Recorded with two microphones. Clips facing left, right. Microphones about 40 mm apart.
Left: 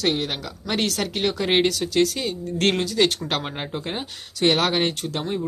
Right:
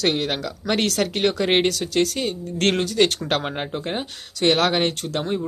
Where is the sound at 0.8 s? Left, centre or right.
Centre.